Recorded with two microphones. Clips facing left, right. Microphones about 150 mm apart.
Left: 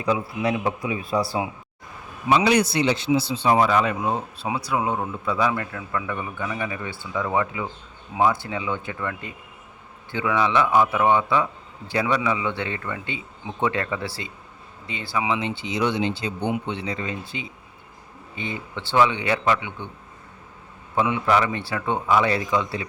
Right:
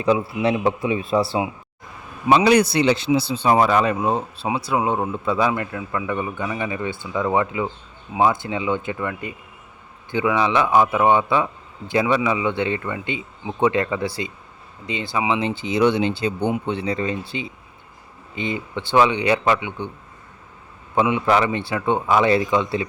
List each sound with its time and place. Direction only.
0.0 s a man's voice: 25° right (ahead or behind)
2.4 s speech: 55° right (ahead or behind)
3.5 s a man's voice: 45° right (ahead or behind); by 15.4 s 20° right (ahead or behind)
15.6 s speech: 55° right (ahead or behind)
16.5 s speech: 40° right (ahead or behind)
18.3 s a man's voice: 15° right (ahead or behind)
20.9 s a man's voice: 20° right (ahead or behind)